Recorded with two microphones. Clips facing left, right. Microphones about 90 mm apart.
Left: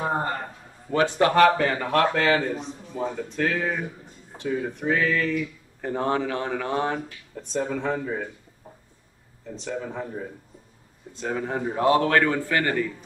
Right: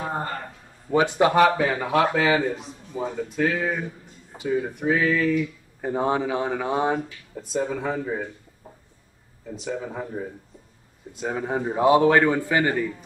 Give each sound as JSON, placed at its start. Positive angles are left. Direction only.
{"t": 0.0, "sound": "a sound", "side_deg": 25}
{"t": 0.9, "sound": "speech", "side_deg": -15}
{"t": 9.5, "sound": "speech", "side_deg": -5}